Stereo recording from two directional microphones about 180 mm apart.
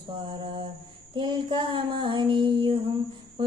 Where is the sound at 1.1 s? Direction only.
25° right (ahead or behind).